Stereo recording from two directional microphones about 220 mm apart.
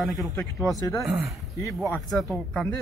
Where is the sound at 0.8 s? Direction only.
15° left (ahead or behind).